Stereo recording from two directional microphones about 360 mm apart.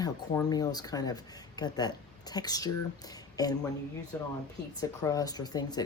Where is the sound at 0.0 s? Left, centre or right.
Centre.